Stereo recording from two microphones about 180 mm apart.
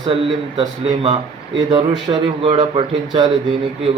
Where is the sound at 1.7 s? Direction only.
25° right (ahead or behind).